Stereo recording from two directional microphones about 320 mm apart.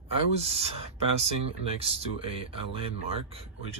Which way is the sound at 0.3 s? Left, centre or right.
Centre.